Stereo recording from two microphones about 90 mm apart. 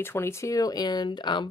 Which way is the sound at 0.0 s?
30° left (ahead or behind).